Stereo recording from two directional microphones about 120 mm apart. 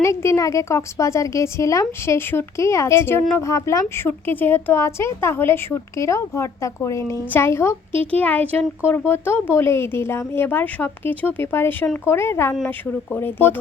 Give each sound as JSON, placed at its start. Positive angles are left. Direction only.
{"t": 0.0, "sound": "a woman's voice", "side_deg": 25}